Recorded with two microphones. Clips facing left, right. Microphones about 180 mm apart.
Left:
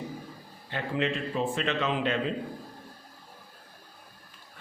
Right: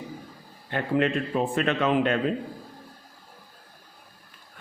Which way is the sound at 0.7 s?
55° right (ahead or behind).